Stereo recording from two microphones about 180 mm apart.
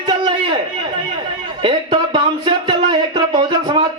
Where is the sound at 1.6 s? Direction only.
25° right (ahead or behind).